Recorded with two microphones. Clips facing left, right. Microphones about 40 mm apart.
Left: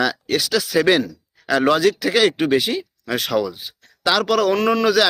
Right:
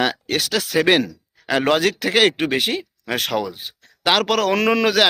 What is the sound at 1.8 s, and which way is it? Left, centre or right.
Speech, right.